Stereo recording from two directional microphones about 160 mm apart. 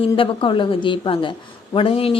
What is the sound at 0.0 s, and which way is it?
A woman's voice, 35° left (ahead or behind).